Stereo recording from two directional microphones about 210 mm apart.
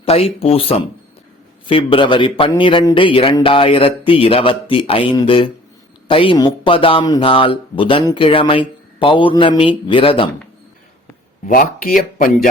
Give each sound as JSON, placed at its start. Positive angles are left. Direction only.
{"t": 0.0, "sound": "speech", "side_deg": 25}
{"t": 11.4, "sound": "speech", "side_deg": 40}